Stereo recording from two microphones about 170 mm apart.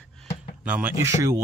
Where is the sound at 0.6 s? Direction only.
10° right (ahead or behind).